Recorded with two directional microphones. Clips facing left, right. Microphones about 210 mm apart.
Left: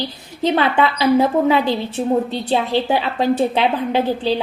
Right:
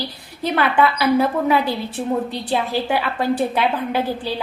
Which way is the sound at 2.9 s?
25° left (ahead or behind).